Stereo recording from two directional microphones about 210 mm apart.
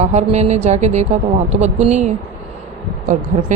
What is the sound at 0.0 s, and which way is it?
Speech, 35° right (ahead or behind).